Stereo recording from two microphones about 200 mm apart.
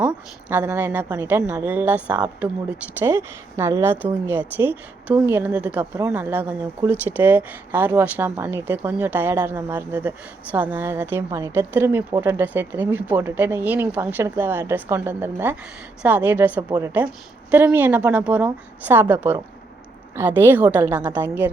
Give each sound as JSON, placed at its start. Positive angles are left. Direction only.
{"t": 0.0, "sound": "a woman's voice", "side_deg": -5}